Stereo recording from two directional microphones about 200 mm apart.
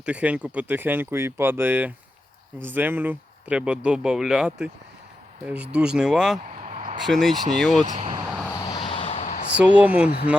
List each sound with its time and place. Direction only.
0.0 s speech: 5° right (ahead or behind)
6.7 s a sound: 35° right (ahead or behind)
7.1 s speech: centre (ahead or behind)
7.9 s speech: 25° right (ahead or behind)
8.4 s a sound: 20° left (ahead or behind); by 9.5 s 40° left (ahead or behind)
9.6 s speech: 5° right (ahead or behind)